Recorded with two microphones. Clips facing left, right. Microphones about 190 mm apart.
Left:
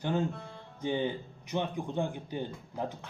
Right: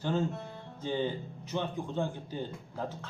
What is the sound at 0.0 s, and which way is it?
Speech, 15° left (ahead or behind).